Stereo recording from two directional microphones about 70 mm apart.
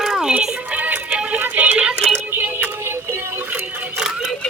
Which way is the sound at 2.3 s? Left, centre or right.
Right.